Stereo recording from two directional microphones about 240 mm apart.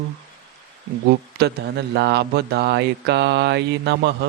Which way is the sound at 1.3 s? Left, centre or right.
Right.